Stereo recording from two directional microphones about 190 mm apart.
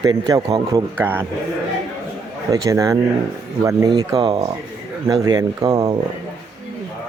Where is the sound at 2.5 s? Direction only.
15° right (ahead or behind).